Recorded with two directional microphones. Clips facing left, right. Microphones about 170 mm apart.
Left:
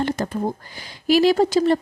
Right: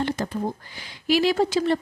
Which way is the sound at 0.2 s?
50° left (ahead or behind).